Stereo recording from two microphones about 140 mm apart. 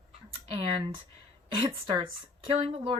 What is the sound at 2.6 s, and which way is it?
Speech, 40° right (ahead or behind).